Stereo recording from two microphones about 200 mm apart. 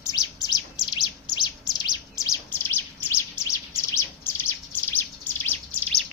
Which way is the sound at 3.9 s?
10° left (ahead or behind).